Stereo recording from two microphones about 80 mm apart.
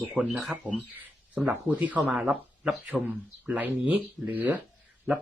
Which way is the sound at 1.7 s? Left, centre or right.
Centre.